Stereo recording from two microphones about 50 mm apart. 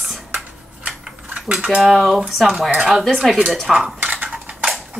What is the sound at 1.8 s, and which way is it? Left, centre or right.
Speech, centre.